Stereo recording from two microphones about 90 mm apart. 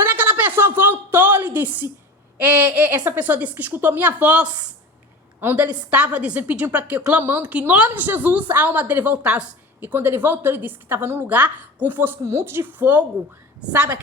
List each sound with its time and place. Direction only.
0.0 s a sound: 20° right (ahead or behind)
2.4 s a woman's voice: 15° right (ahead or behind)
9.9 s a woman's voice: 25° right (ahead or behind)